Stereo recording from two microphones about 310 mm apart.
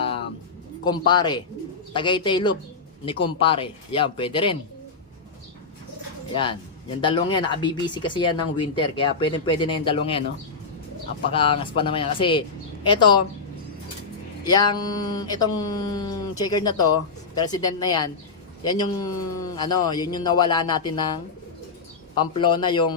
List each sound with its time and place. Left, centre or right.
0.9 s speech: centre
6.3 s speech: centre
11.3 s speech: centre
14.4 s speech: centre
22.4 s speech: centre